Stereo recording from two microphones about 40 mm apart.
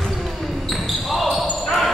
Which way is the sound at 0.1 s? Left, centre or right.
Centre.